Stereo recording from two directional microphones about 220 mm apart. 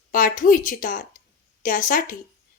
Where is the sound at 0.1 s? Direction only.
40° left (ahead or behind).